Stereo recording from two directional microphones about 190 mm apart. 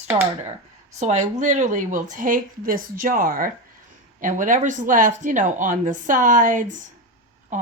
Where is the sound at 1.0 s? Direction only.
40° right (ahead or behind).